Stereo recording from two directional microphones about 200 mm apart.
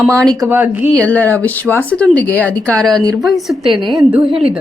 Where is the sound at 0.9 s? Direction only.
5° left (ahead or behind).